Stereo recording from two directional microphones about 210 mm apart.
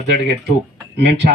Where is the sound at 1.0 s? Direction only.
50° right (ahead or behind).